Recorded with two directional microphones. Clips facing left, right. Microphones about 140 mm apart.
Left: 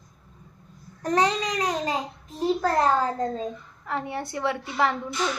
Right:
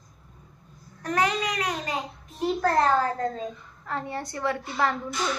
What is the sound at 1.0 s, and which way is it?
Speech, 30° left (ahead or behind).